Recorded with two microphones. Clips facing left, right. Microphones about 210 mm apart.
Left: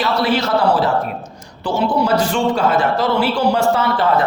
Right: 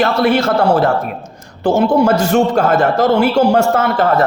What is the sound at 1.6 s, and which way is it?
A man's voice, 45° right (ahead or behind).